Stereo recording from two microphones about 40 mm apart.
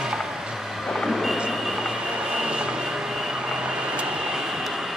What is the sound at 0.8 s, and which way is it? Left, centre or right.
Vehicle, centre.